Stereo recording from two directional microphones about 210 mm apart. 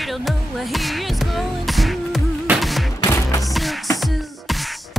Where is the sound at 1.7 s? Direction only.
Centre (ahead or behind).